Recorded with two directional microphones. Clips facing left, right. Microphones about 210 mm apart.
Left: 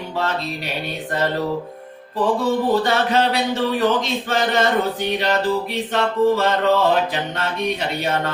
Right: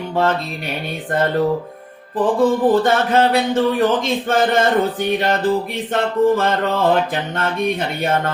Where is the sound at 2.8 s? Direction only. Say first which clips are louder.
Right 3 dB; 50° right (ahead or behind).